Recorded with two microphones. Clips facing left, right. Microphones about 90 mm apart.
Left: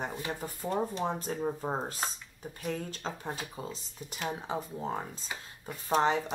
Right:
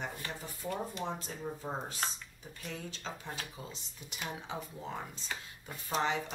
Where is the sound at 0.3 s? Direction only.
50° left (ahead or behind).